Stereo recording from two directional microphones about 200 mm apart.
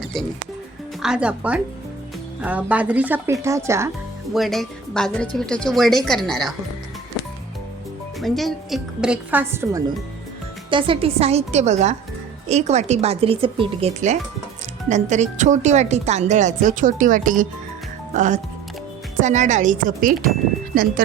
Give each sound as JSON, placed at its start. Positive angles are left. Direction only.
{"t": 0.0, "sound": "music", "side_deg": 0}
{"t": 1.0, "sound": "a woman's voice", "side_deg": -5}
{"t": 4.4, "sound": "a woman's voice", "side_deg": 0}
{"t": 8.2, "sound": "a woman's voice", "side_deg": 0}
{"t": 10.7, "sound": "speech", "side_deg": -25}